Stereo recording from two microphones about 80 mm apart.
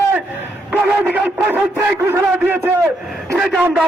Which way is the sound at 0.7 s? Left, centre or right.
Centre.